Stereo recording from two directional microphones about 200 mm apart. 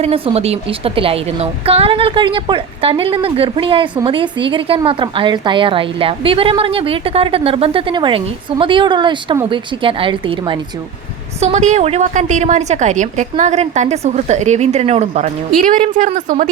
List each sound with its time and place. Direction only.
0.0 s a woman's voice: 30° right (ahead or behind)
11.3 s a woman's voice: 35° right (ahead or behind)